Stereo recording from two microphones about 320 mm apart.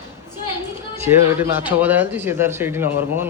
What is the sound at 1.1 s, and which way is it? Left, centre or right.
Speech, centre.